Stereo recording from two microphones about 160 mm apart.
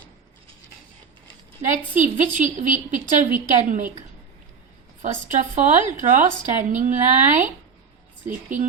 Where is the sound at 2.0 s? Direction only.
50° right (ahead or behind).